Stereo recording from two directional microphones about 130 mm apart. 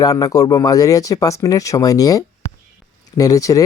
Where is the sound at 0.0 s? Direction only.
30° left (ahead or behind).